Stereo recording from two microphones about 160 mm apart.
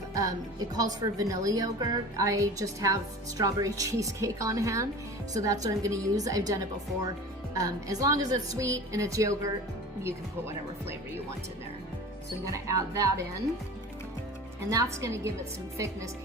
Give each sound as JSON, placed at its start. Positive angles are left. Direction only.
{"t": 0.1, "sound": "a woman's voice", "side_deg": -20}
{"t": 12.5, "sound": "a woman's voice", "side_deg": -20}
{"t": 14.7, "sound": "a woman's voice", "side_deg": -20}